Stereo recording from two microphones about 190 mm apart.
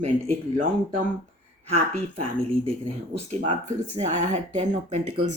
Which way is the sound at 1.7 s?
35° right (ahead or behind).